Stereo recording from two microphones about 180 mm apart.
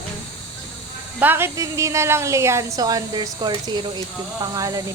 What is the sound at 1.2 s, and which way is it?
A woman's voice, 10° right (ahead or behind).